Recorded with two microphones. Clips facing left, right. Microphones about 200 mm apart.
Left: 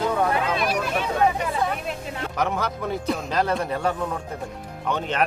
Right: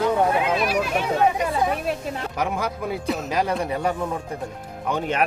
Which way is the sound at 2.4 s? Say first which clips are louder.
Left 1 dB; 10° right (ahead or behind).